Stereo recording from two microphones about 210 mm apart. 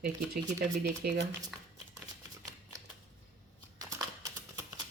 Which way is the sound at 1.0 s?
45° right (ahead or behind).